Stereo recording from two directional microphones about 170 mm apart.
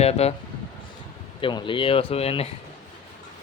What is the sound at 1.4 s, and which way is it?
Speech, 30° left (ahead or behind).